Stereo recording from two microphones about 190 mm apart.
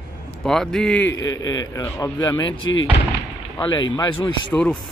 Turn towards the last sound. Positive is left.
turn(degrees=5)  # may be behind; listen again after turning